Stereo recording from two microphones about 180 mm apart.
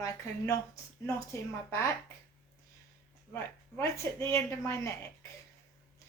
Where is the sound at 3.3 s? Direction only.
15° left (ahead or behind).